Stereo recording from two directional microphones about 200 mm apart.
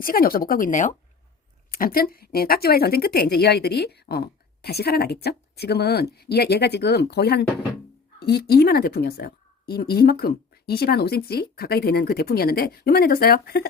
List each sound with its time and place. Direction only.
0.0 s speech: 45° left (ahead or behind)